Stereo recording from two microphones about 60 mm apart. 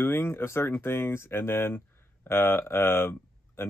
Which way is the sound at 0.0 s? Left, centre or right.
Left.